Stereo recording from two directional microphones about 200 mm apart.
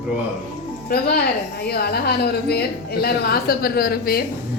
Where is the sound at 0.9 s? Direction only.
50° left (ahead or behind).